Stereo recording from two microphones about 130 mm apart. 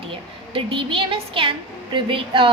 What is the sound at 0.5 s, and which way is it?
A woman's voice, 40° right (ahead or behind).